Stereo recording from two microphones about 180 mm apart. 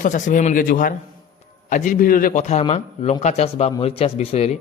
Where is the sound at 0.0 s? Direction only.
45° left (ahead or behind).